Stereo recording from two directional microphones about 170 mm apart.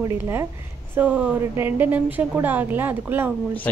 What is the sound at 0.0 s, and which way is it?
A woman's voice, 15° right (ahead or behind).